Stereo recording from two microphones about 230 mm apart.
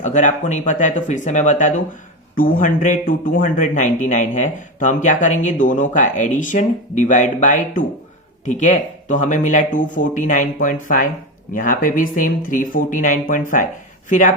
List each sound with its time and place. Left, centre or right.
0.0 s speech: left